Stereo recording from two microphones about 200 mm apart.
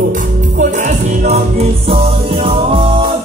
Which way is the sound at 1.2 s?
30° right (ahead or behind).